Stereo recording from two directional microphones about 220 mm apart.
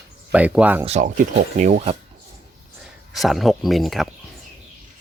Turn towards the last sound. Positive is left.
turn(degrees=0)  # may be behind; listen again after turning